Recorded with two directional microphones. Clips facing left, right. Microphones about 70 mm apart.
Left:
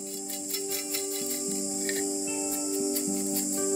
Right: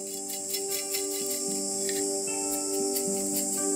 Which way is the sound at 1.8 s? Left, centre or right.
Left.